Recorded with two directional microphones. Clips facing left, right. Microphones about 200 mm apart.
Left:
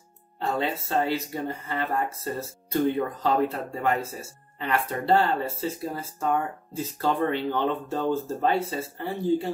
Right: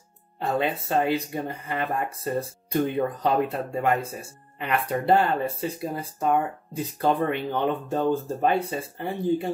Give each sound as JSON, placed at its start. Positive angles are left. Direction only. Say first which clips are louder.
{"t": 0.4, "sound": "speech", "louder": "right 2 dB", "side_deg": -15}